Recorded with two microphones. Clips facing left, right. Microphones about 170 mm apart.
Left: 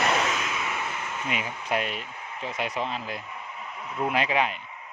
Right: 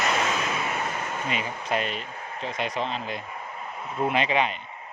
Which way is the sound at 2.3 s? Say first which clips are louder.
Right 1 dB; 10° left (ahead or behind).